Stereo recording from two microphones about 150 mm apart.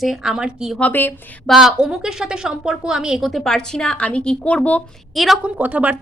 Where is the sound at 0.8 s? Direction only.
10° left (ahead or behind).